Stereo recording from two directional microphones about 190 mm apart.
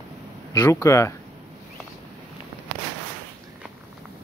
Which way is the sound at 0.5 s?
15° left (ahead or behind).